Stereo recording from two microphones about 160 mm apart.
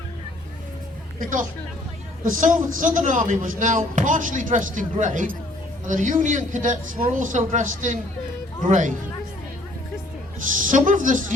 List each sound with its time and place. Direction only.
1.2 s a woman's voice: 55° right (ahead or behind)
10.6 s a woman's voice: 55° right (ahead or behind)